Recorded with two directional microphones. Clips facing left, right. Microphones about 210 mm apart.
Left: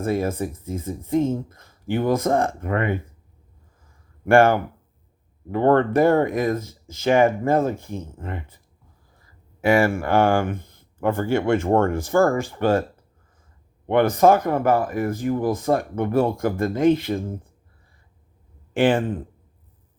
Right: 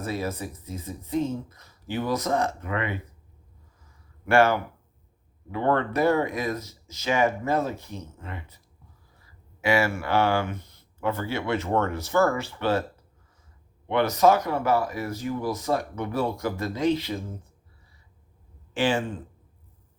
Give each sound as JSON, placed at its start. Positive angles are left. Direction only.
{"t": 0.0, "sound": "speech", "side_deg": 50}
{"t": 4.3, "sound": "speech", "side_deg": 50}
{"t": 13.8, "sound": "speech", "side_deg": 50}
{"t": 18.7, "sound": "speech", "side_deg": 55}